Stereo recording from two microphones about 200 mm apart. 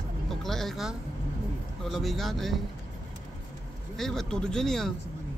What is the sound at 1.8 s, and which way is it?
Speech, centre (ahead or behind).